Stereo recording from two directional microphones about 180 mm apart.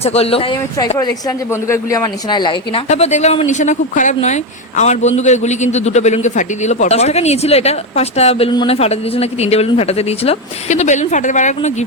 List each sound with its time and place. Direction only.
0.0 s a man's voice: 35° left (ahead or behind)
1.6 s speech: 15° left (ahead or behind)
2.9 s a man's voice: 40° left (ahead or behind)